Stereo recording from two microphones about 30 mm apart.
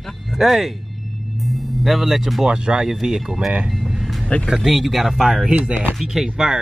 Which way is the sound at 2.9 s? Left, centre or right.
Centre.